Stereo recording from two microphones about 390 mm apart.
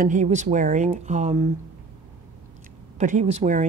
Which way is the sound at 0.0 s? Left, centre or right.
Centre.